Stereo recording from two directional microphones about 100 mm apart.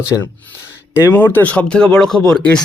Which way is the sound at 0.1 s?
30° left (ahead or behind).